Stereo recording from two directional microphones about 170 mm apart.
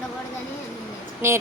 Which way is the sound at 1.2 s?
15° right (ahead or behind).